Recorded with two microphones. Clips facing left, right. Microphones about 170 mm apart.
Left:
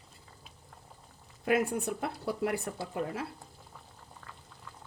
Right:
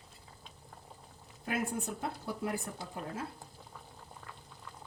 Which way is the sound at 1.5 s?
70° left (ahead or behind).